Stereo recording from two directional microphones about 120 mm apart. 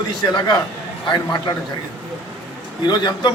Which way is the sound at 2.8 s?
35° left (ahead or behind).